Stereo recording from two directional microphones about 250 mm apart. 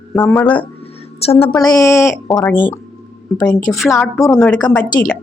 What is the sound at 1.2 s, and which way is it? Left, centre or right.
A woman's voice, left.